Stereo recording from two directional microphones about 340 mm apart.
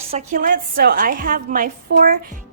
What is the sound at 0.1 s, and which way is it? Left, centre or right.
A woman's voice, right.